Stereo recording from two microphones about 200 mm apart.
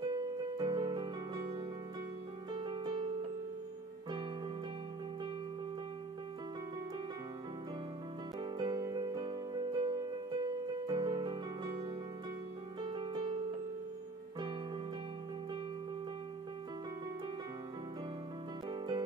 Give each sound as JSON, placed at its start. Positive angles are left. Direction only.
{"t": 0.1, "sound": "music", "side_deg": -20}
{"t": 8.4, "sound": "music", "side_deg": -20}
{"t": 18.7, "sound": "music", "side_deg": -20}